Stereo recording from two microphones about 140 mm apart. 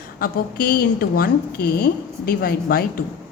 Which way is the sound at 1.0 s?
90° left.